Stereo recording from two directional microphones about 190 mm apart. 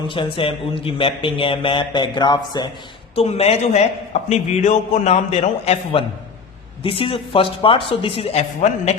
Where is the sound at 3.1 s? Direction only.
30° left (ahead or behind).